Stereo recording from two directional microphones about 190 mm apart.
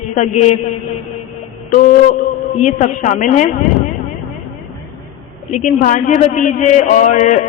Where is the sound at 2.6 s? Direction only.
40° left (ahead or behind).